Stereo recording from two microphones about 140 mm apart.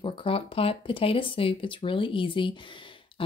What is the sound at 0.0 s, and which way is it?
A woman's voice, 40° left (ahead or behind).